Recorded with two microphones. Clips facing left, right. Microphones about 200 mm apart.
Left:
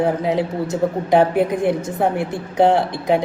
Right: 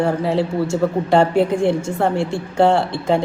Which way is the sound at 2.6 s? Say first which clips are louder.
Even; 15° left (ahead or behind).